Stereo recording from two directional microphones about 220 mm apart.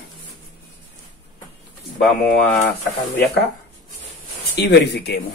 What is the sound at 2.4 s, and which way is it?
Speech, 10° left (ahead or behind).